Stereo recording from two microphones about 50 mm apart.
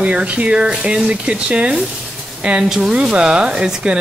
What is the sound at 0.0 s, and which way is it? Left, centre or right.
Speech, right.